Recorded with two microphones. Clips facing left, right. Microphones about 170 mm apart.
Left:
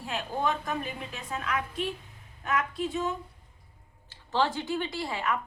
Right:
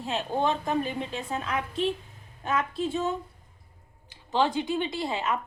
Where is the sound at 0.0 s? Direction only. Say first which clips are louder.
Right 3 dB; 25° right (ahead or behind).